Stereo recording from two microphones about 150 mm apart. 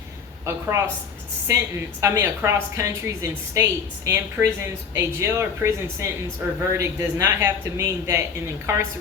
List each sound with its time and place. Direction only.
0.4 s a woman's voice: 20° right (ahead or behind)